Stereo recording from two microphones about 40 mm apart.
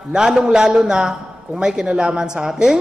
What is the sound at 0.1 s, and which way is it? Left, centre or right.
A man's voice, centre.